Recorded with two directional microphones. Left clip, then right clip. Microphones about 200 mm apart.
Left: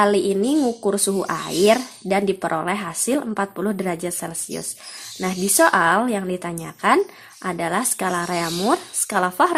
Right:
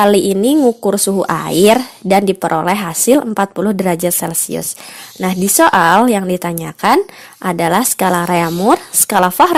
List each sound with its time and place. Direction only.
0.0 s a woman's voice: 40° right (ahead or behind)